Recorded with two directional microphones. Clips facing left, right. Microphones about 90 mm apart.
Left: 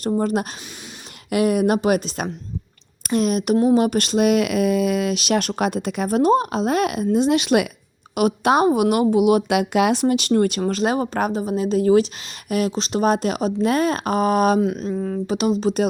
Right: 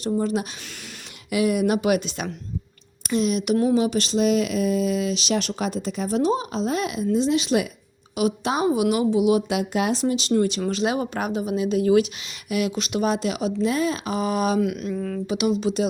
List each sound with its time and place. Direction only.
0.0 s a woman's voice: 50° left (ahead or behind)
3.8 s speech: 55° left (ahead or behind)
10.6 s a woman's voice: 45° left (ahead or behind)
14.6 s speech: 35° left (ahead or behind)